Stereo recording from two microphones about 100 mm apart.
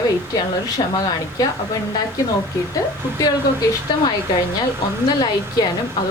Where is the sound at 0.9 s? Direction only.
40° left (ahead or behind).